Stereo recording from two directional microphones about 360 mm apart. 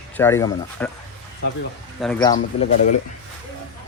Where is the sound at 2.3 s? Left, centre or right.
Centre.